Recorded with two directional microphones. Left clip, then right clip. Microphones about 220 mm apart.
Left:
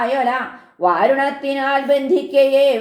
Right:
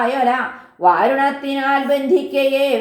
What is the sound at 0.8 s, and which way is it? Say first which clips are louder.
Speech: right 1 dB; 35° left (ahead or behind).